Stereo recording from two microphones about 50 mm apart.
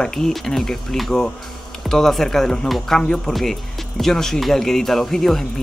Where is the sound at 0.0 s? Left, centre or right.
Centre.